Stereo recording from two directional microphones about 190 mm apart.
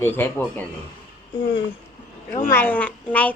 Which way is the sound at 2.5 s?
10° left (ahead or behind).